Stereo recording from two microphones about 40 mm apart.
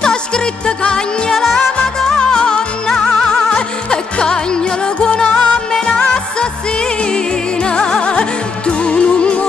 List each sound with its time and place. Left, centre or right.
0.0 s music: left
1.3 s music: centre
7.6 s music: left